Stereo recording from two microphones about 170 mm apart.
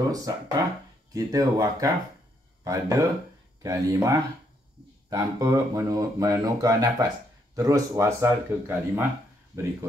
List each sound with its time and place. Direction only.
0.1 s a man's voice: 20° right (ahead or behind)